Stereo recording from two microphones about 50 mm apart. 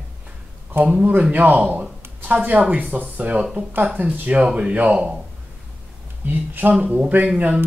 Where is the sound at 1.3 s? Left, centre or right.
Right.